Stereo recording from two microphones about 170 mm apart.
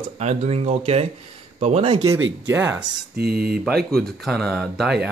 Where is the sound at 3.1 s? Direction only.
65° right (ahead or behind).